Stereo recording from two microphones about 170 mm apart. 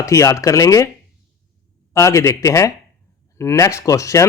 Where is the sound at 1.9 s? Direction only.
20° left (ahead or behind).